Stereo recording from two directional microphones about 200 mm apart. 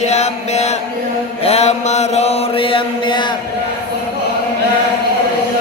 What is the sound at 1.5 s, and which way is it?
Mantra, 30° left (ahead or behind).